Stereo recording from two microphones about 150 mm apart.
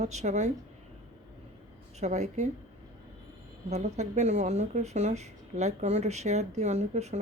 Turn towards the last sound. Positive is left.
turn(degrees=-50)  # may be behind; listen again after turning